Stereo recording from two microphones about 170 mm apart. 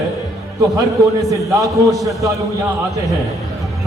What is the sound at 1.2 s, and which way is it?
A man's voice, 20° right (ahead or behind).